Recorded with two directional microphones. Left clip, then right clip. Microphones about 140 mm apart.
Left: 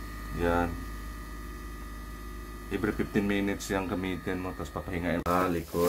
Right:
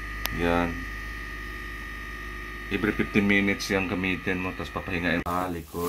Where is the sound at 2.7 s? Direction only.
25° right (ahead or behind).